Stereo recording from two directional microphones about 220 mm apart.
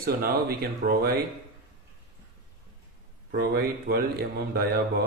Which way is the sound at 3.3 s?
45° right (ahead or behind).